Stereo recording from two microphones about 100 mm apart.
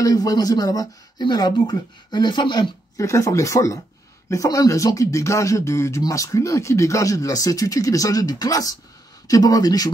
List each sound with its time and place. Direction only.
0.0 s speech: 40° left (ahead or behind)
3.0 s speech: 30° left (ahead or behind)